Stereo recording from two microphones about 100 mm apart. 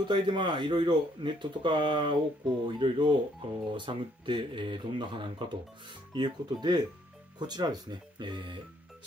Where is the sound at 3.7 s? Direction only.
55° right (ahead or behind).